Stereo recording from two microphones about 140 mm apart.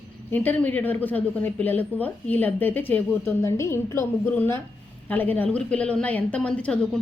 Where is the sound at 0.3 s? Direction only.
10° left (ahead or behind).